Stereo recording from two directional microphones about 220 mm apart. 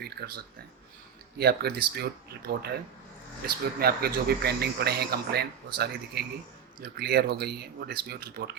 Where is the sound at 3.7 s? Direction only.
45° right (ahead or behind).